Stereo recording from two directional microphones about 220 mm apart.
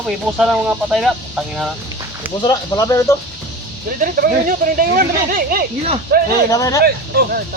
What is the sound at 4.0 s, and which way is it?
Speech, 40° right (ahead or behind).